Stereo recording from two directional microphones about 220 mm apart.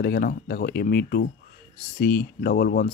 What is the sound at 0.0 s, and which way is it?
Speech, 45° left (ahead or behind).